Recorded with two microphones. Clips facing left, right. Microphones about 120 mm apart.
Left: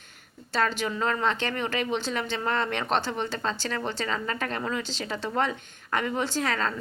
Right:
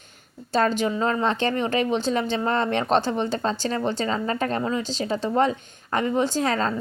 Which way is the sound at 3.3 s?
35° right (ahead or behind).